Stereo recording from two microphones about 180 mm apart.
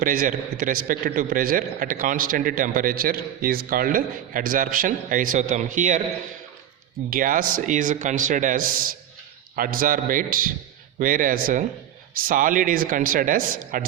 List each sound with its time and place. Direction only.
0.0 s a man's voice: 50° right (ahead or behind)
7.1 s a man's voice: 50° right (ahead or behind)